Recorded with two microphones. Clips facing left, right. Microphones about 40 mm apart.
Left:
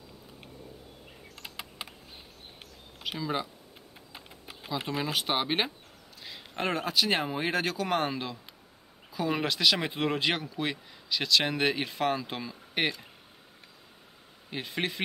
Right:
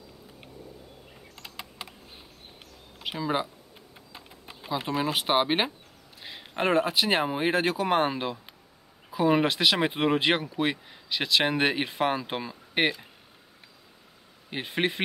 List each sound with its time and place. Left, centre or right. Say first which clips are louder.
1.6 s computer keyboard: right 1 dB; centre
3.0 s speech: right 4 dB; centre
3.7 s a sound: right 1 dB; centre
4.6 s speech: right 4 dB; centre
14.5 s speech: right 5 dB; right